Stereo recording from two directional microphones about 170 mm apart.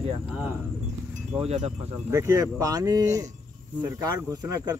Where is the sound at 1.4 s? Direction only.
40° right (ahead or behind).